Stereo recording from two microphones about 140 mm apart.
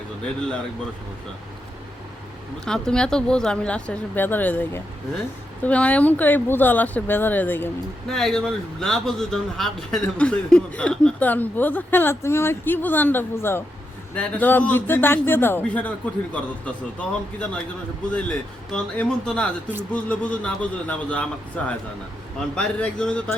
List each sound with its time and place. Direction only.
2.6 s speech: 5° left (ahead or behind)
8.1 s speech: 5° left (ahead or behind)
18.1 s speech: 10° left (ahead or behind)